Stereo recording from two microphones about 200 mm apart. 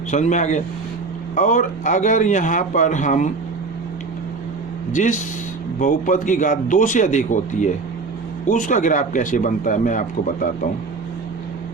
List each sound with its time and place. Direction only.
0.1 s speech: 35° left (ahead or behind)
4.9 s speech: 40° left (ahead or behind)